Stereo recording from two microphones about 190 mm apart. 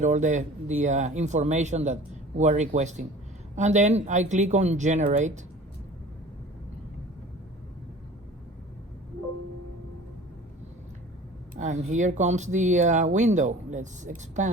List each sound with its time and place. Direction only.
0.0 s speech: 40° right (ahead or behind)
11.5 s speech: 40° right (ahead or behind)